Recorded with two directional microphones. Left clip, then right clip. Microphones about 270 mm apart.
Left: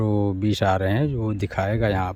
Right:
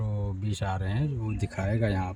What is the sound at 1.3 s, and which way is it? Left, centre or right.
Speech, centre.